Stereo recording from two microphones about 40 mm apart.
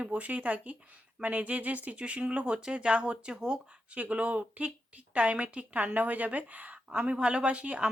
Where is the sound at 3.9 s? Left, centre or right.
Right.